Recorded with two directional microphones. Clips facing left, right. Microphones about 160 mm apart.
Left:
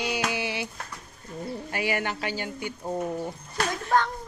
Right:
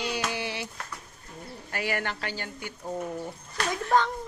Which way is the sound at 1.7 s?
15° left (ahead or behind).